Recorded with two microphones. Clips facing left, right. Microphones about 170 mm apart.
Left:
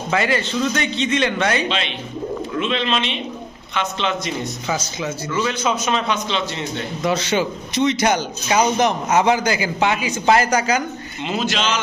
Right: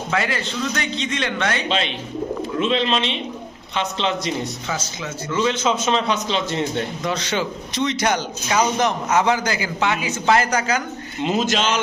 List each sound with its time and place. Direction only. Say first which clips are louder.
0.1 s a man's voice: left 4 dB; centre (ahead or behind)
2.6 s a man's voice: right 2 dB; 35° right (ahead or behind)
4.7 s a man's voice: left 4 dB; 10° left (ahead or behind)
5.4 s a man's voice: right 2 dB; 25° right (ahead or behind); by 6.8 s 45° right (ahead or behind)
7.3 s a man's voice: left 3 dB; 10° left (ahead or behind)
11.2 s speech: right 2 dB; 40° right (ahead or behind)